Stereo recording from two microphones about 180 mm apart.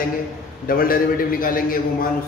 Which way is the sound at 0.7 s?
55° left (ahead or behind).